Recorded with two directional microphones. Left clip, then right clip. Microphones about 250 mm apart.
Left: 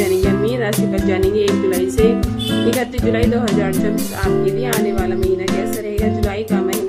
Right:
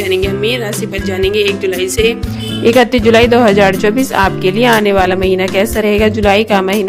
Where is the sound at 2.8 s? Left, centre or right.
Right.